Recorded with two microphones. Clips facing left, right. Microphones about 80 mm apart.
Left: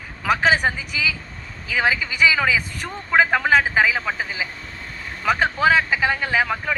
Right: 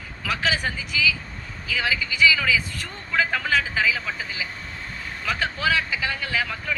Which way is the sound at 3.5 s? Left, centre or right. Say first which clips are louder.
Left 5 dB; left.